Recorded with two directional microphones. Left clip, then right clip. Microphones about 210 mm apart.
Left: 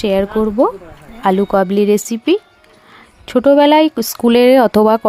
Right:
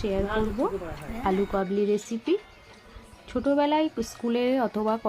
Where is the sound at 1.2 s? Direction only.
55° left (ahead or behind).